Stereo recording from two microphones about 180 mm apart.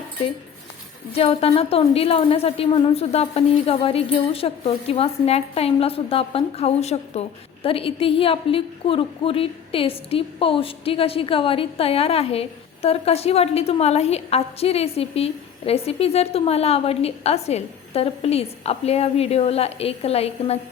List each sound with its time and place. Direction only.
1.1 s a woman's voice: 35° left (ahead or behind)